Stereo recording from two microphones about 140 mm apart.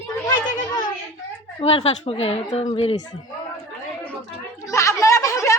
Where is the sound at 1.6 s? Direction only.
45° left (ahead or behind).